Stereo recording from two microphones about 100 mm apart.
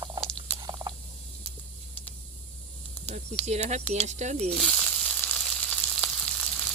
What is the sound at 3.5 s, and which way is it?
Speech, 90° right.